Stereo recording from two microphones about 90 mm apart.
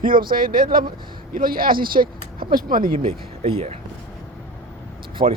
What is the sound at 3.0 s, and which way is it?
Speech, 90° right.